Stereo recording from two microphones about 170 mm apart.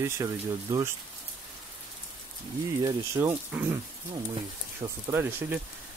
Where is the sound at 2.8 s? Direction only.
20° right (ahead or behind).